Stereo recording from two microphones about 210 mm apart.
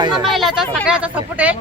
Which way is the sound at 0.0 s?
20° right (ahead or behind).